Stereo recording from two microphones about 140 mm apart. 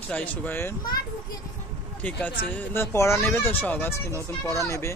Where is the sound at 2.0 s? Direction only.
10° left (ahead or behind).